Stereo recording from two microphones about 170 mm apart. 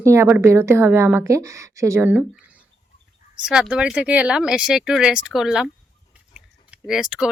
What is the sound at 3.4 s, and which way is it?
Speech, 5° right (ahead or behind).